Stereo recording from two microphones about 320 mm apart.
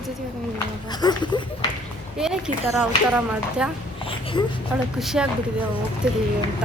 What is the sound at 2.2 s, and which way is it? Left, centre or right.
Speech, centre.